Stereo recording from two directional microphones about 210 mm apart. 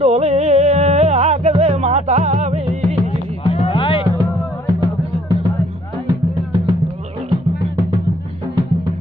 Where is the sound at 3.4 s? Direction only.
25° left (ahead or behind).